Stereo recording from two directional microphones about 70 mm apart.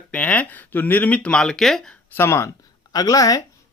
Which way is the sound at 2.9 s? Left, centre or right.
Left.